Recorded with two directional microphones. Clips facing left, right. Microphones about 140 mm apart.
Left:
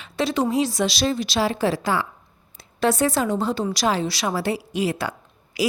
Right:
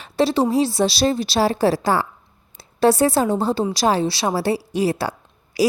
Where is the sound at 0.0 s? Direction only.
35° right (ahead or behind).